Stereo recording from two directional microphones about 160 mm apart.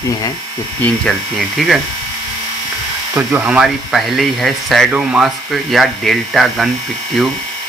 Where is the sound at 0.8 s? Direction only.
Centre (ahead or behind).